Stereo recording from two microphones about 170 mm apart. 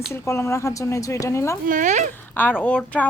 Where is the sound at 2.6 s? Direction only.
10° left (ahead or behind).